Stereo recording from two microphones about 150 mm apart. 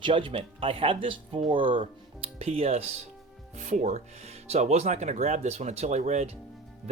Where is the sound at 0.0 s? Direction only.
35° right (ahead or behind).